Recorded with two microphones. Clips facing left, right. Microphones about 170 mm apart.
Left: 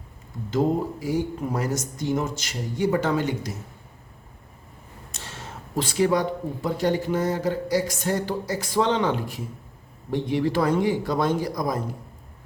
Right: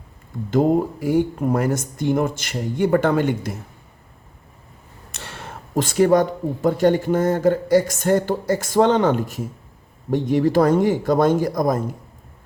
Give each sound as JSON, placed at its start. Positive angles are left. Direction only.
{"t": 0.5, "sound": "speech", "side_deg": -55}
{"t": 5.1, "sound": "speech", "side_deg": -65}